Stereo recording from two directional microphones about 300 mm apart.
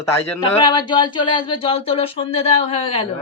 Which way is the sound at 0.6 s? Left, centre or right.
Centre.